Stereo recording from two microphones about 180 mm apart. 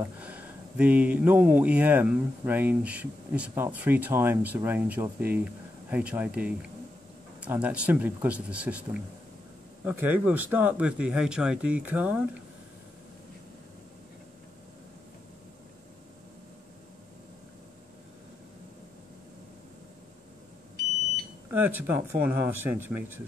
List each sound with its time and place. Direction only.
0.2 s speech: 10° right (ahead or behind)
21.5 s speech: 10° right (ahead or behind)